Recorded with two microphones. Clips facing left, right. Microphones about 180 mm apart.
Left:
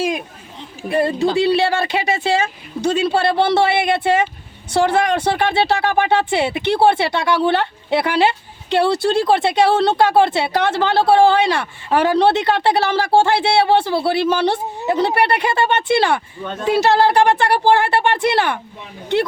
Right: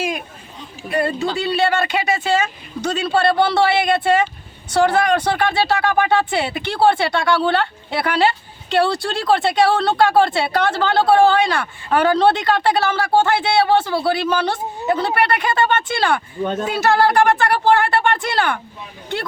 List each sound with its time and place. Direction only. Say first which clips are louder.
0.9 s speech: left 3 dB; 25° left (ahead or behind)
16.4 s speech: right 6 dB; 40° right (ahead or behind)
16.6 s speech: left 4 dB; 30° left (ahead or behind)